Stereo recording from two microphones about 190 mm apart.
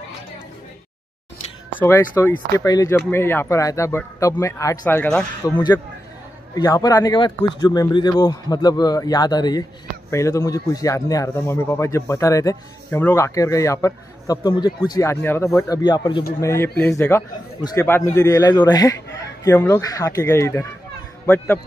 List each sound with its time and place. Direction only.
1.7 s speech: 10° left (ahead or behind)
5.4 s speech: 20° left (ahead or behind)
16.3 s speech: 15° left (ahead or behind)